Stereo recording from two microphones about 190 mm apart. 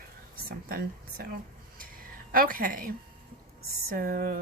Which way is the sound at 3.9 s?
50° right (ahead or behind).